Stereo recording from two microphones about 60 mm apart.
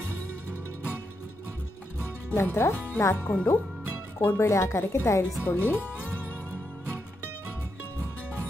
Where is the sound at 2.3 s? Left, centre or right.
Left.